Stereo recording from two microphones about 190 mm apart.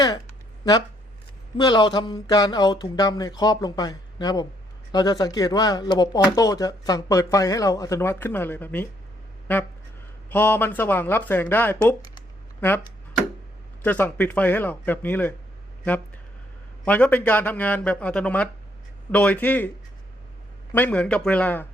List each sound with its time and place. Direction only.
1.5 s speech: 25° left (ahead or behind)
10.2 s speech: 10° left (ahead or behind)
12.5 s a sound: 10° left (ahead or behind)
13.8 s speech: 10° left (ahead or behind)
16.8 s speech: 10° left (ahead or behind)
20.7 s speech: 10° left (ahead or behind)